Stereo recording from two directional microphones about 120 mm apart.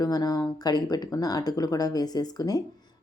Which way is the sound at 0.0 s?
35° left (ahead or behind).